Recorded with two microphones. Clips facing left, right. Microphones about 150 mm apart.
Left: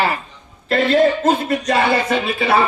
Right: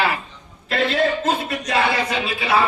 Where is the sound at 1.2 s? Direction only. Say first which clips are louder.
Left 5 dB; 55° left (ahead or behind).